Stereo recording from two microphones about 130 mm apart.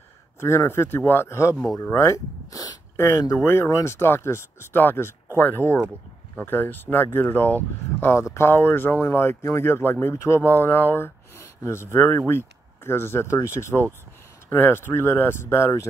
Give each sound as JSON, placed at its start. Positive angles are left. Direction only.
{"t": 0.4, "sound": "speech", "side_deg": 20}